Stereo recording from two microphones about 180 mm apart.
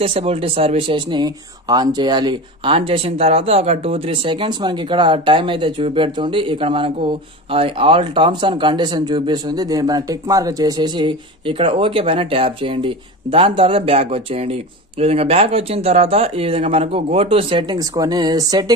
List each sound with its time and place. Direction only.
0.0 s speech: 30° right (ahead or behind)